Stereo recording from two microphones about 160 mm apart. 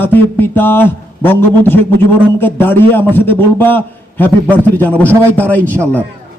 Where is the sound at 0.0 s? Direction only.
10° left (ahead or behind).